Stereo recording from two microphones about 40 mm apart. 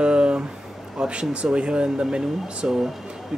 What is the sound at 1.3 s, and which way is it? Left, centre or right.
Speech, right.